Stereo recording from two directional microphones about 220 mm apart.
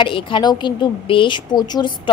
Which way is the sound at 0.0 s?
20° left (ahead or behind).